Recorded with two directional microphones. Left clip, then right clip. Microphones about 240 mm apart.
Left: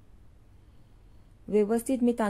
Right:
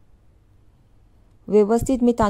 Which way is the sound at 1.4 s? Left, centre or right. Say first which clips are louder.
Right 9 dB; right.